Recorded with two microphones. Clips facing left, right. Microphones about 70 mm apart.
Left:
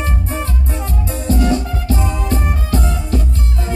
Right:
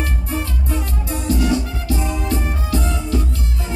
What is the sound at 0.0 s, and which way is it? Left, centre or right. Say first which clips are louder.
Music: left 2 dB; left.